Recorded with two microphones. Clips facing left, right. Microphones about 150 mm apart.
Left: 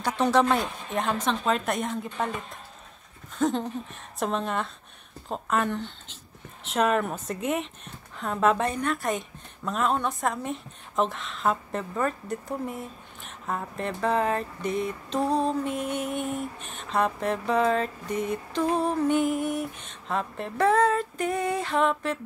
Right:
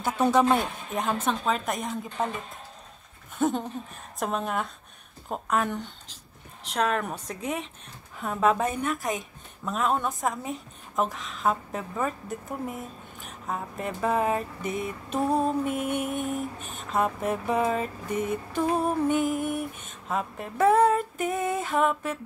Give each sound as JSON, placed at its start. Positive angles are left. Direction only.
{"t": 0.0, "sound": "a woman's voice", "side_deg": -5}
{"t": 3.3, "sound": "a sound", "side_deg": -5}
{"t": 4.2, "sound": "a woman's voice", "side_deg": -5}
{"t": 6.7, "sound": "a woman's voice", "side_deg": 0}
{"t": 15.8, "sound": "mantra", "side_deg": -55}
{"t": 16.7, "sound": "a woman's voice", "side_deg": -5}